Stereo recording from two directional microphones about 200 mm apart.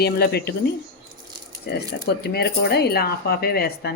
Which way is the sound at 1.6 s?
55° left (ahead or behind).